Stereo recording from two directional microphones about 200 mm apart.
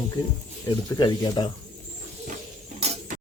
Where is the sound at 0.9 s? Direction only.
20° left (ahead or behind).